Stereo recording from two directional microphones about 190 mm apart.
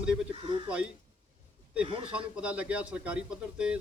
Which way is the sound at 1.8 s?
30° right (ahead or behind).